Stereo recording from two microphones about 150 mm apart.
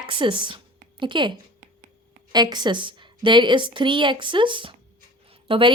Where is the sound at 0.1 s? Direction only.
35° right (ahead or behind).